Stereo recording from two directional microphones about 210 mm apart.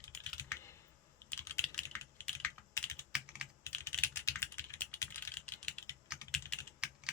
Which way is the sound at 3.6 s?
10° left (ahead or behind).